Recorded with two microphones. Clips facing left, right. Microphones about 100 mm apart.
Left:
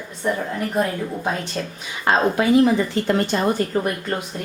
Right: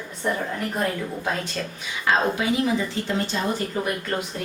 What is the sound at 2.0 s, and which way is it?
Speech, 50° left (ahead or behind).